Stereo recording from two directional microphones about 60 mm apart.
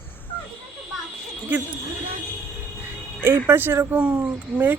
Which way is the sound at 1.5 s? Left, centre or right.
Right.